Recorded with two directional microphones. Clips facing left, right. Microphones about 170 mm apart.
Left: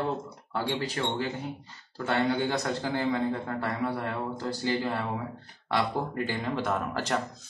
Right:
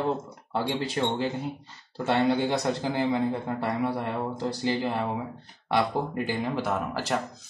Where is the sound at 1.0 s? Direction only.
20° right (ahead or behind).